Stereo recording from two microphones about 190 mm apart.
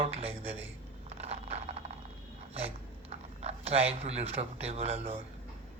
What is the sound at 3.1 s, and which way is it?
Speech, 35° right (ahead or behind).